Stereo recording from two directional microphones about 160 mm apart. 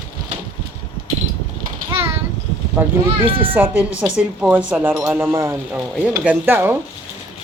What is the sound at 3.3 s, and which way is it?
Speech, 35° right (ahead or behind).